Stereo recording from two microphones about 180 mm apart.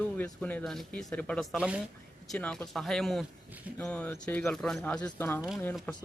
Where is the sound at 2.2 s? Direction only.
5° left (ahead or behind).